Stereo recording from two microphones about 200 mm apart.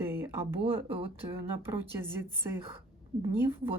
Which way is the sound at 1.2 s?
10° right (ahead or behind).